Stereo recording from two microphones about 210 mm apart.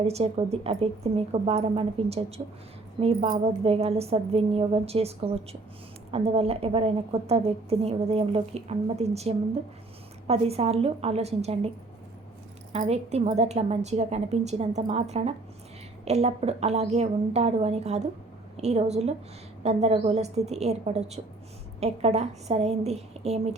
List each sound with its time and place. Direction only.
0.0 s a woman's voice: 30° right (ahead or behind)
12.7 s a woman's voice: 30° right (ahead or behind)